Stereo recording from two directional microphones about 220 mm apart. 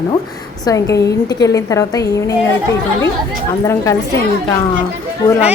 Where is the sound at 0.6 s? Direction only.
15° left (ahead or behind).